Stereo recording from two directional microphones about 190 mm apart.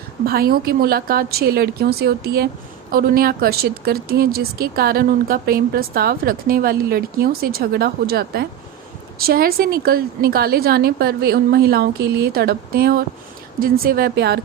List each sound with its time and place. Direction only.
0.3 s a woman's voice: 50° right (ahead or behind)